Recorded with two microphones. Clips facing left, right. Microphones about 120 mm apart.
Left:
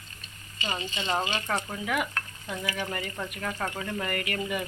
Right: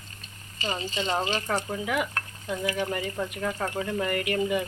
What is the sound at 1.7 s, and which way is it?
Speech, 20° right (ahead or behind).